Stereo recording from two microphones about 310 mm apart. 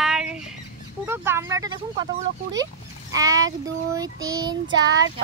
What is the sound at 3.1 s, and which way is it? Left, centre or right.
Child singing, centre.